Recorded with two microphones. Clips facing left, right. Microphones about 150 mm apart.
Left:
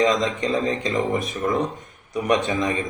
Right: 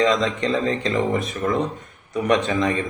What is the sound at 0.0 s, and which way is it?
Speech, 15° left (ahead or behind).